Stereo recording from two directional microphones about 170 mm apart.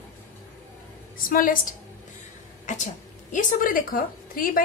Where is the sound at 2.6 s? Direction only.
45° left (ahead or behind).